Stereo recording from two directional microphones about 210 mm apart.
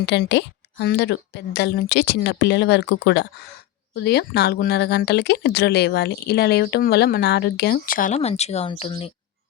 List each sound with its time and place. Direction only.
0.0 s a woman's voice: 55° left (ahead or behind); by 9.1 s 25° left (ahead or behind)